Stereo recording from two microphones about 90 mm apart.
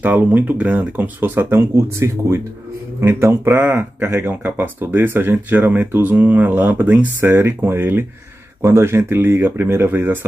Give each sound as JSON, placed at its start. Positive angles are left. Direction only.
{"t": 0.0, "sound": "speech", "side_deg": -20}